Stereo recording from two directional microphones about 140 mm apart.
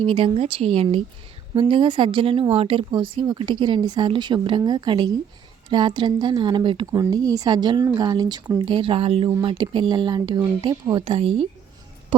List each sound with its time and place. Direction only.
0.0 s a woman's voice: 35° right (ahead or behind)